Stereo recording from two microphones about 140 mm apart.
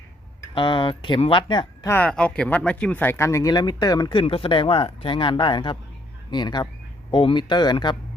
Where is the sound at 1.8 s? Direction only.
10° left (ahead or behind).